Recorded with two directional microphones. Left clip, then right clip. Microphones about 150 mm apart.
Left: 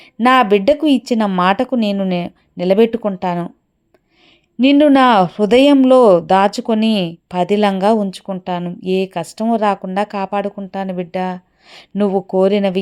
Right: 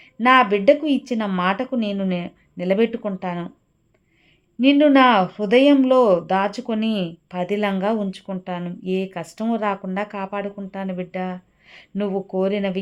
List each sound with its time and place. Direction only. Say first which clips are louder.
0.0 s speech: left 3 dB; 40° left (ahead or behind)
4.6 s speech: left 4 dB; 40° left (ahead or behind)